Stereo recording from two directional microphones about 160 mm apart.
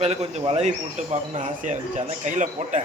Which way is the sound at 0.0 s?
40° right (ahead or behind).